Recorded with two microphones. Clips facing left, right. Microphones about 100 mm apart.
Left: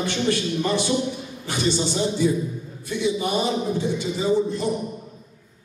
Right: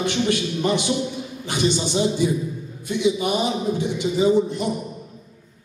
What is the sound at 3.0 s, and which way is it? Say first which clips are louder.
A man's voice: right 2 dB; 15° right (ahead or behind).